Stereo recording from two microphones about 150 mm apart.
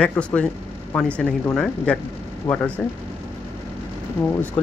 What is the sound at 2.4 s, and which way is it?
Speech, 25° left (ahead or behind).